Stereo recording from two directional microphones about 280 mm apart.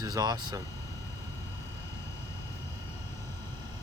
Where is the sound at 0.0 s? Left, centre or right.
Centre.